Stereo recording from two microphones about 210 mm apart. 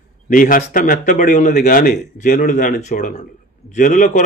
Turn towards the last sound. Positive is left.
turn(degrees=35)  # may be behind; listen again after turning